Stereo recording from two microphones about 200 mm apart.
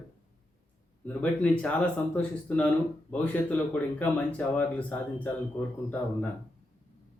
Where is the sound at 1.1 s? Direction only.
5° left (ahead or behind).